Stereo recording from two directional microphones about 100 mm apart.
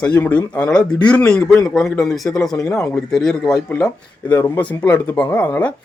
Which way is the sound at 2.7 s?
30° left (ahead or behind).